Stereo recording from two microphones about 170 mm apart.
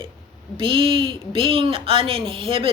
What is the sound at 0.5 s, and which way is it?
Speech, 30° right (ahead or behind).